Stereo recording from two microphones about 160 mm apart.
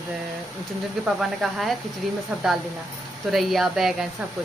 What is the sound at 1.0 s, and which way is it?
Speech, centre (ahead or behind).